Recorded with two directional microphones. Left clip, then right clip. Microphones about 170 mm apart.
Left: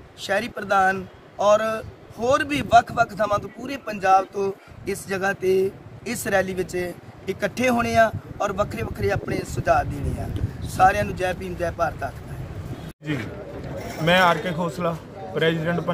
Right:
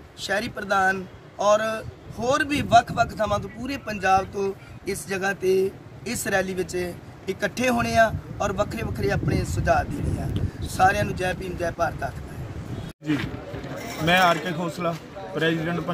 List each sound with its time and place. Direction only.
0.3 s speech: 5° left (ahead or behind)
14.0 s a man's voice: 5° left (ahead or behind)